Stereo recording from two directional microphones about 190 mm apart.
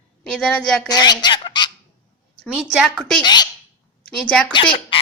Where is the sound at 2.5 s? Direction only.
Centre (ahead or behind).